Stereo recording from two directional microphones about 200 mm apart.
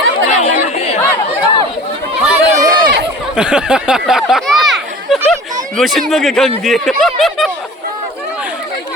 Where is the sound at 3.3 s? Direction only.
5° right (ahead or behind).